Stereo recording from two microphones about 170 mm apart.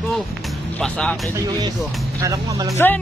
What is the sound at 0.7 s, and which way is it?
Speech, 5° left (ahead or behind).